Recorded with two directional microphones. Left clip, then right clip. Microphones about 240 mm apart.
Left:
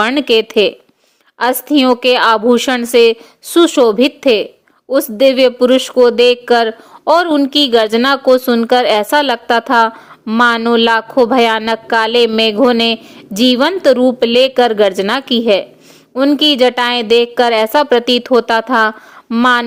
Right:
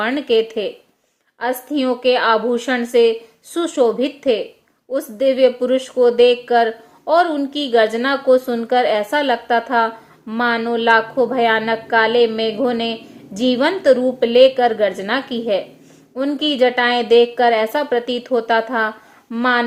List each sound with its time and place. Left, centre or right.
0.0 s speech: left